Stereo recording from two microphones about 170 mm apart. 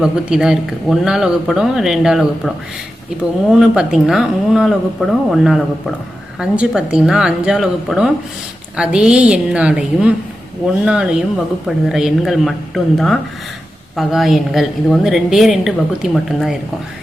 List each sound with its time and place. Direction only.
0.0 s a woman's voice: 5° right (ahead or behind)
3.5 s a woman's voice: 5° right (ahead or behind)